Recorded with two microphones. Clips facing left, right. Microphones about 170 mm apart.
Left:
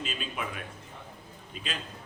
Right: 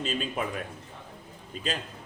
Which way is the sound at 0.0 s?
40° right (ahead or behind).